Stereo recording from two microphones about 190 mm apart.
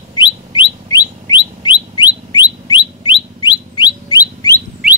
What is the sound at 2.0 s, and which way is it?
Bird, 25° left (ahead or behind).